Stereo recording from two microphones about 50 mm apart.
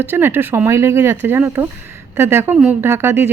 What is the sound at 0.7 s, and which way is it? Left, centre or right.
Speech, right.